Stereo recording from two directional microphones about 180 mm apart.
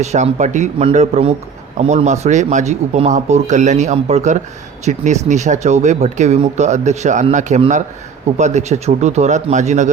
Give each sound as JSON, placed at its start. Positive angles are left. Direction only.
{"t": 0.0, "sound": "speech", "side_deg": -40}